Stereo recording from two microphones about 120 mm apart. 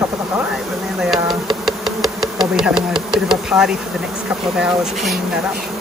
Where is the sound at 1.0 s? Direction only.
5° right (ahead or behind).